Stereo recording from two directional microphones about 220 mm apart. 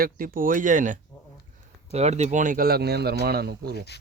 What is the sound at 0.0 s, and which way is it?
Speech, 40° right (ahead or behind).